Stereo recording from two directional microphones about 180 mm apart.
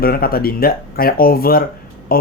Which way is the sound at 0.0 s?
55° left (ahead or behind).